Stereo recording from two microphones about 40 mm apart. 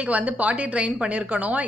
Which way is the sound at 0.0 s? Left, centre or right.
Right.